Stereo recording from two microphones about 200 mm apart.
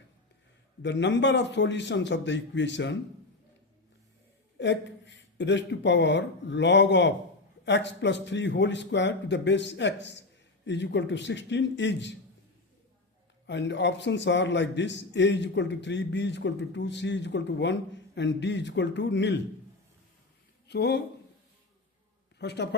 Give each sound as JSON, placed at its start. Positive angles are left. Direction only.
{"t": 0.8, "sound": "a man's voice", "side_deg": 60}
{"t": 4.5, "sound": "a man's voice", "side_deg": 60}
{"t": 13.5, "sound": "a man's voice", "side_deg": 60}
{"t": 20.7, "sound": "speech", "side_deg": 55}
{"t": 22.4, "sound": "speech", "side_deg": 55}